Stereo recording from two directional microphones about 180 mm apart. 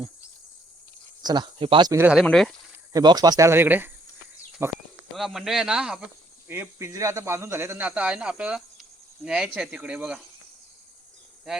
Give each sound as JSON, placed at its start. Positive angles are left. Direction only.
{"t": 1.2, "sound": "speech", "side_deg": -25}
{"t": 1.9, "sound": "speech", "side_deg": -15}
{"t": 2.1, "sound": "speech", "side_deg": 0}
{"t": 2.9, "sound": "speech", "side_deg": -25}
{"t": 5.1, "sound": "speech", "side_deg": 0}
{"t": 6.5, "sound": "speech", "side_deg": -15}